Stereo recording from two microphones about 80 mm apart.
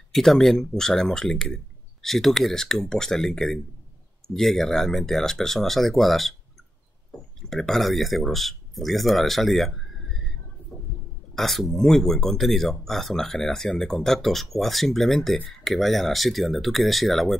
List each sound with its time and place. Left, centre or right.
0.1 s speech: centre
7.4 s speech: centre
10.7 s a sound: centre
11.3 s speech: centre